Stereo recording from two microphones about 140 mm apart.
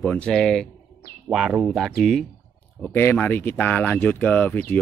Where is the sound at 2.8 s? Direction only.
15° left (ahead or behind).